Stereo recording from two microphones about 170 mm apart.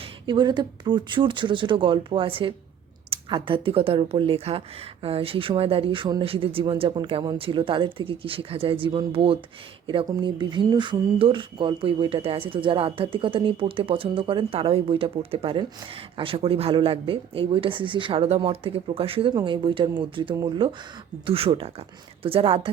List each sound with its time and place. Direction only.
0.3 s speech: 25° right (ahead or behind)